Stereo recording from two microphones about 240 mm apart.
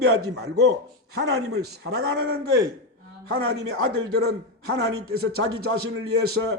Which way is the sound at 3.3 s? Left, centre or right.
Right.